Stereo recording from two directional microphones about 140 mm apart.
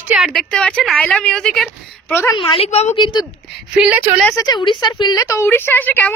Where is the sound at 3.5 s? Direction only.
5° right (ahead or behind).